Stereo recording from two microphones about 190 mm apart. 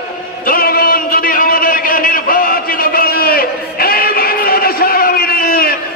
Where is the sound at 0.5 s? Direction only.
50° left (ahead or behind).